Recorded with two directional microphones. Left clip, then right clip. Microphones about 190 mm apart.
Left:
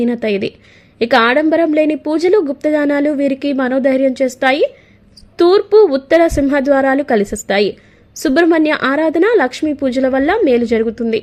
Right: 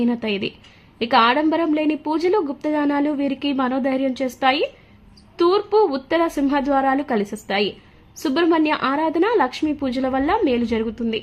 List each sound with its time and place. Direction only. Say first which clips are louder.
0.0 s a woman's voice: left 7 dB; 20° left (ahead or behind)